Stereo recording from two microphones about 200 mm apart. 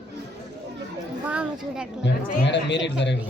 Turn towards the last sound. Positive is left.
turn(degrees=60)  # may be behind; listen again after turning